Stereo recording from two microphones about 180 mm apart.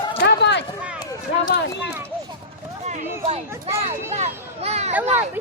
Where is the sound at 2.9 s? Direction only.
40° right (ahead or behind).